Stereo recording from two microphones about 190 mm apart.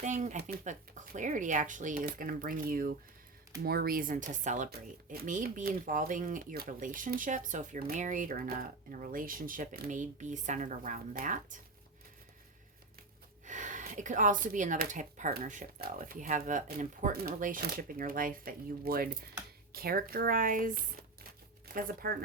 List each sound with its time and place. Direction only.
0.0 s speech: 40° right (ahead or behind)
13.4 s speech: 40° right (ahead or behind)